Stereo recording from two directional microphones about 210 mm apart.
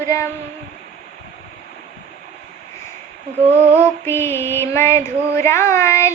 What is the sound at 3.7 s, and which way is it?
Female singing, 10° right (ahead or behind).